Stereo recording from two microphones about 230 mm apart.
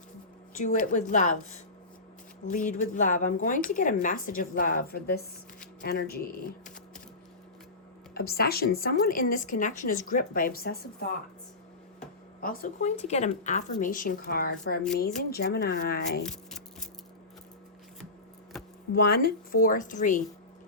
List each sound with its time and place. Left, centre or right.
0.5 s speech: left
8.1 s speech: left
11.9 s speech: left
16.2 s scissors: centre
18.9 s speech: left